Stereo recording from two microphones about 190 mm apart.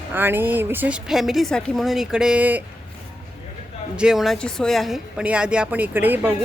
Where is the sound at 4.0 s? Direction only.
Centre (ahead or behind).